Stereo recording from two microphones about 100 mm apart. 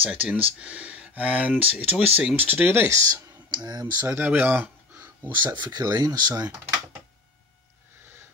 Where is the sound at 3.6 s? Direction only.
45° right (ahead or behind).